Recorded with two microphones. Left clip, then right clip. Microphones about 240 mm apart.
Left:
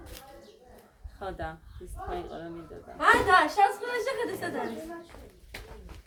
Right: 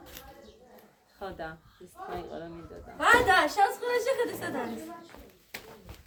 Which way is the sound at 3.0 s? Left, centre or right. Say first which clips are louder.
Left 1 dB; right.